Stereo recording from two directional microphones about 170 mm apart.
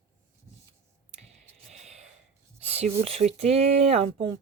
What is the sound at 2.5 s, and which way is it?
Speech, 40° right (ahead or behind).